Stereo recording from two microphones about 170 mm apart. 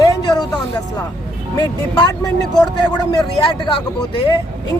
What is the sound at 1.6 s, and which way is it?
Speech, 20° left (ahead or behind).